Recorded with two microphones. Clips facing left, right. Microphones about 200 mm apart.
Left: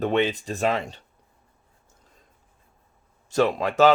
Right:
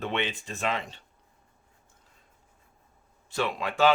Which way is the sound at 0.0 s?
40° left (ahead or behind).